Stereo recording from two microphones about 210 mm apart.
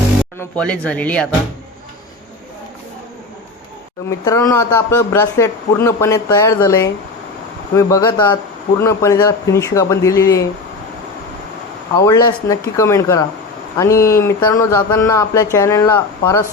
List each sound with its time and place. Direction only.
0.3 s speech: 5° left (ahead or behind)
4.3 s a man's voice: 15° left (ahead or behind)
11.9 s a man's voice: 15° left (ahead or behind)